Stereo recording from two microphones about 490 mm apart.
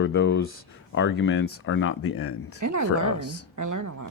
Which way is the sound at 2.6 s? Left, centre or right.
Right.